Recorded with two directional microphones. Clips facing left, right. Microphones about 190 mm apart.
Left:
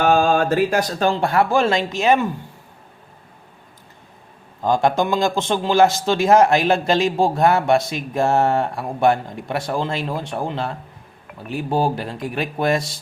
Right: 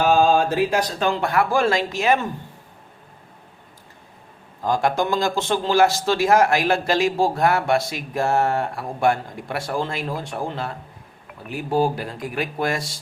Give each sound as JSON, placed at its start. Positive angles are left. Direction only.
{"t": 0.0, "sound": "speech", "side_deg": 55}
{"t": 4.6, "sound": "a man's voice", "side_deg": 20}
{"t": 11.7, "sound": "a man's voice", "side_deg": 25}